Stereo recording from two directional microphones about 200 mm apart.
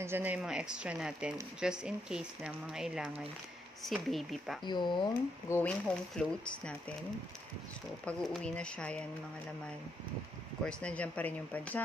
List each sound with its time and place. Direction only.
0.0 s speech: 10° right (ahead or behind)
4.6 s speech: 20° left (ahead or behind)
5.6 s speech: 5° left (ahead or behind)
8.0 s speech: 5° left (ahead or behind)
10.6 s speech: 5° left (ahead or behind)